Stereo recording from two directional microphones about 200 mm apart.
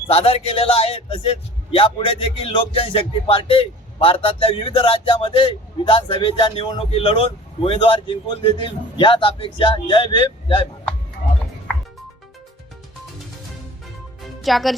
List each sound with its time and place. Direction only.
0.1 s speech: 30° left (ahead or behind)
14.4 s speech: centre (ahead or behind)